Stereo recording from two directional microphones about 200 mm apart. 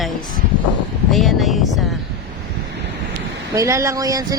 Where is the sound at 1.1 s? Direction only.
Centre (ahead or behind).